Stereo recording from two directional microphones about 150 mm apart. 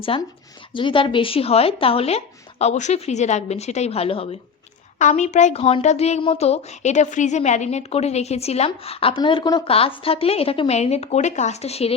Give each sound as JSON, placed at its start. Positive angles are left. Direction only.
{"t": 0.1, "sound": "speech", "side_deg": 40}
{"t": 4.9, "sound": "speech", "side_deg": 50}